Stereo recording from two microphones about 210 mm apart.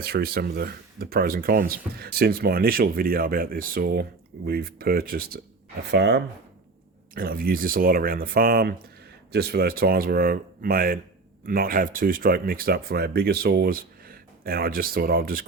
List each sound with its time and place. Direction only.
0.0 s speech: 45° right (ahead or behind)